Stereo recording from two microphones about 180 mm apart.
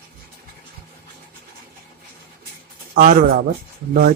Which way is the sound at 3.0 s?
50° right (ahead or behind).